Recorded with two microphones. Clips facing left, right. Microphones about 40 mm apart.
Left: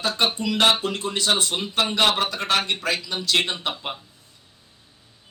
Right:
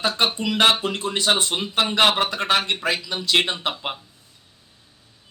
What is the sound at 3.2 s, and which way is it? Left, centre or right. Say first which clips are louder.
Speech: right 3 dB; centre.